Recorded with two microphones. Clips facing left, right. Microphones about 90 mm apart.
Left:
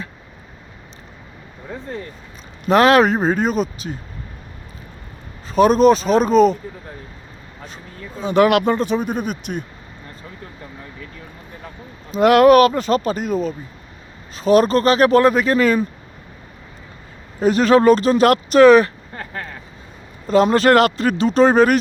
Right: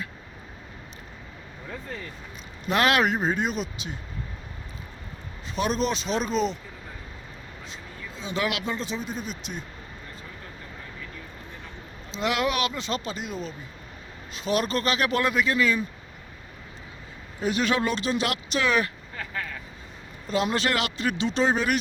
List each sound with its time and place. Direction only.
1.7 s speech: 30° left (ahead or behind)
5.5 s speech: 45° left (ahead or behind)
7.6 s speech: 50° left (ahead or behind)
12.1 s speech: 55° left (ahead or behind)
17.4 s speech: 40° left (ahead or behind)